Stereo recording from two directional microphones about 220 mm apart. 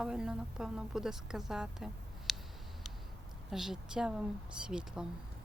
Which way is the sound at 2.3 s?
Centre (ahead or behind).